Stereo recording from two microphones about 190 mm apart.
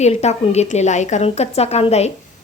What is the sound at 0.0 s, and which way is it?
A woman's voice, 35° left (ahead or behind).